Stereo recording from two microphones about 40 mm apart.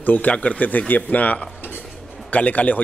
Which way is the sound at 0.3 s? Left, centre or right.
Left.